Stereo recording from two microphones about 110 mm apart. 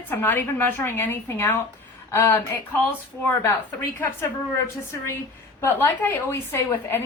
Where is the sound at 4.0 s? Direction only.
20° left (ahead or behind).